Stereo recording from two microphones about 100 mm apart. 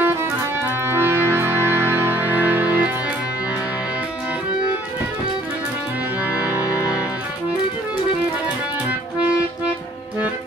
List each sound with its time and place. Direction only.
0.0 s music: 20° right (ahead or behind)
6.3 s accordion: 15° right (ahead or behind)
6.6 s music: 35° left (ahead or behind)